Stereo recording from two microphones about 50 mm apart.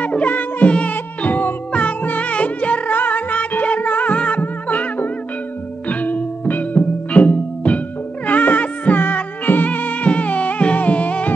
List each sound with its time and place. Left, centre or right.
0.0 s music: left